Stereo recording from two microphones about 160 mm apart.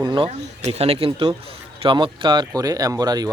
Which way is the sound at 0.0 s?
30° right (ahead or behind).